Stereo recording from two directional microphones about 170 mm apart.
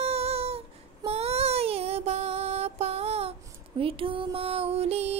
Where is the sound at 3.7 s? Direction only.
30° right (ahead or behind).